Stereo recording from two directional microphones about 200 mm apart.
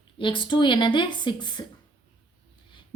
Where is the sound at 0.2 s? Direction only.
25° left (ahead or behind).